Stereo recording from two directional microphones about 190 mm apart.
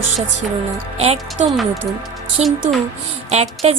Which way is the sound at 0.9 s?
35° right (ahead or behind).